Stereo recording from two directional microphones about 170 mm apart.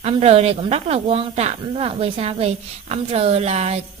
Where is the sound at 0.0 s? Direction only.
35° right (ahead or behind).